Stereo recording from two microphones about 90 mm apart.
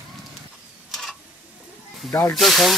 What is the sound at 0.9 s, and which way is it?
Tick-tock, centre (ahead or behind).